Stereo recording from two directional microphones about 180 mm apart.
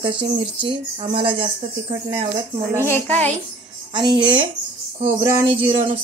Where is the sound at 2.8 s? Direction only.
10° left (ahead or behind).